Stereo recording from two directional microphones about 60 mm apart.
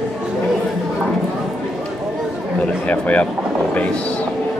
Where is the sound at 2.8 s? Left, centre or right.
Left.